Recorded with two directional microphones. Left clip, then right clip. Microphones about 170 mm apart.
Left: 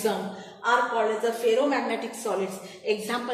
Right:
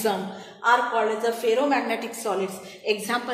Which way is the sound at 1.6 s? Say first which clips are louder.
Right 2 dB; 30° right (ahead or behind).